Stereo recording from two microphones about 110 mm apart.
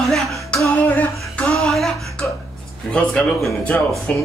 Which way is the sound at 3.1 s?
5° left (ahead or behind).